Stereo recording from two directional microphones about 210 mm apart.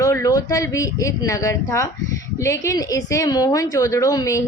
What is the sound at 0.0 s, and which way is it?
A woman's voice, 15° left (ahead or behind).